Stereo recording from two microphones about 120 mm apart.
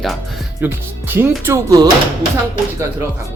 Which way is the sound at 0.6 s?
15° right (ahead or behind).